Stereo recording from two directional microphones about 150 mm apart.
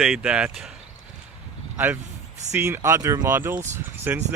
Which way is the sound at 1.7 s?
10° right (ahead or behind).